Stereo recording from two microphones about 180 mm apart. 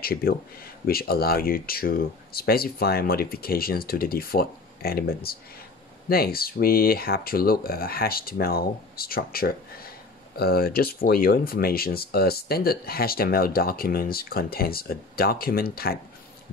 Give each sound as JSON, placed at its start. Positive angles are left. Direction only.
{"t": 0.0, "sound": "speech", "side_deg": 55}